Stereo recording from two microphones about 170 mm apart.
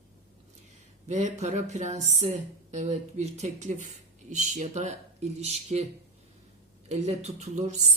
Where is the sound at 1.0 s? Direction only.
40° right (ahead or behind).